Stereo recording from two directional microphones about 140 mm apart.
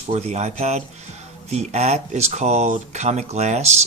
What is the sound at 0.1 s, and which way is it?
Speech, 50° right (ahead or behind).